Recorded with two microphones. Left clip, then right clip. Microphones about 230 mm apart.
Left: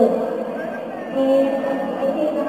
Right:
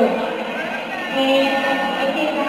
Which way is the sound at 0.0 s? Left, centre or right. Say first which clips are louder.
Left 1 dB; centre.